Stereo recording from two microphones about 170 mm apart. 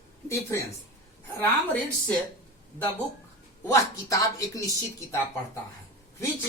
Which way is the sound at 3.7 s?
20° left (ahead or behind).